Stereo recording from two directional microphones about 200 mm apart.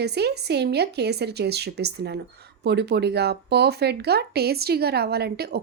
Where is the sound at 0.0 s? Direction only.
55° right (ahead or behind).